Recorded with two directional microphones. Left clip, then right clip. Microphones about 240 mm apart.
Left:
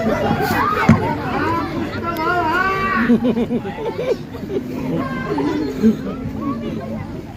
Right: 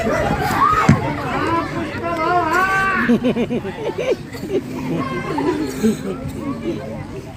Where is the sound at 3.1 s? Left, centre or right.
Right.